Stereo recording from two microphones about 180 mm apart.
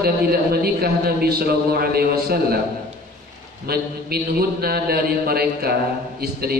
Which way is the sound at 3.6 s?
60° right (ahead or behind).